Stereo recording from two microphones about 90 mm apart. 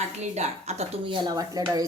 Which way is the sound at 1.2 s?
45° right (ahead or behind).